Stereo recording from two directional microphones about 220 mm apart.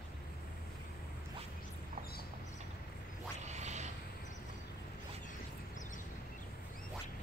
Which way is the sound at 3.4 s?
30° right (ahead or behind).